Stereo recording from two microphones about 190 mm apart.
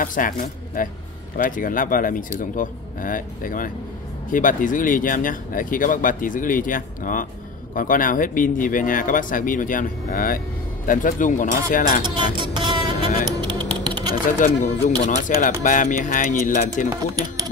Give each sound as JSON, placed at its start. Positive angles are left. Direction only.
{"t": 0.0, "sound": "speech", "side_deg": 45}
{"t": 12.4, "sound": "a sound", "side_deg": -25}
{"t": 13.6, "sound": "typing", "side_deg": -25}
{"t": 14.4, "sound": "speech", "side_deg": 40}